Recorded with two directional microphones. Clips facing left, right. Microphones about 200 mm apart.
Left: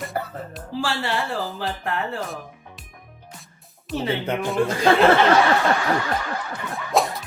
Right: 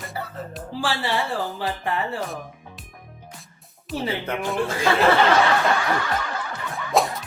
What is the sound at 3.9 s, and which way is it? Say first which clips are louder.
Speech: left 2 dB; centre (ahead or behind).